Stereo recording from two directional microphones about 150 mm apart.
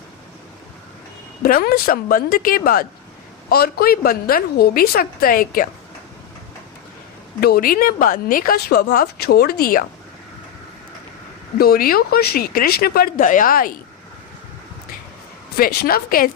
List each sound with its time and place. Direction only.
1.4 s a woman's voice: 80° left
3.5 s speech: 90° left; by 5.6 s 70° left (ahead or behind)
7.4 s speech: 80° left
11.5 s speech: 80° left
15.5 s speech: 85° left